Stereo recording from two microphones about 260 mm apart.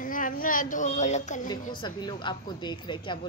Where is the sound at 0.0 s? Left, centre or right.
Left.